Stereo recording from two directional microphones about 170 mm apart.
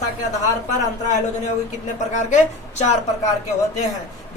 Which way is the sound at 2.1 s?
45° left (ahead or behind).